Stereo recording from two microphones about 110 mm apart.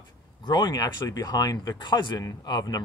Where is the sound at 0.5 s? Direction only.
40° left (ahead or behind).